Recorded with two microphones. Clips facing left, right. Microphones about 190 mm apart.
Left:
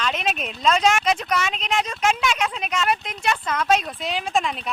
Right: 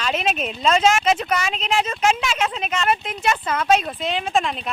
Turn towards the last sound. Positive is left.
turn(degrees=0)  # may be behind; listen again after turning